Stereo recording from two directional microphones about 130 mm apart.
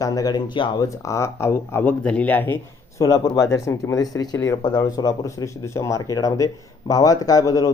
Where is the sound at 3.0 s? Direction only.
25° left (ahead or behind).